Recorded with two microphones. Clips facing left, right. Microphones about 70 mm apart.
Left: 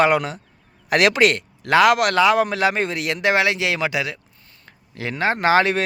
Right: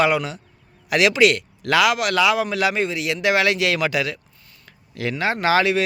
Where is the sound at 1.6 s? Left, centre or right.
Left.